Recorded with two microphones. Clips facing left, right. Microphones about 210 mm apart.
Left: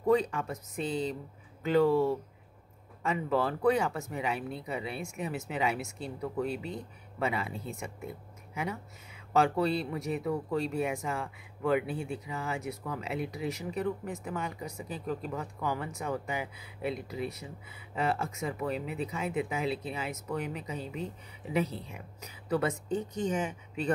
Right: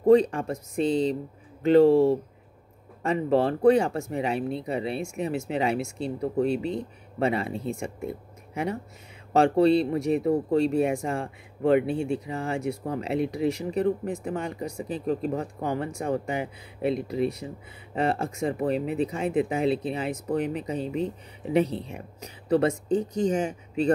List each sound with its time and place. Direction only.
0.0 s speech: 30° right (ahead or behind)
9.3 s speech: 30° right (ahead or behind)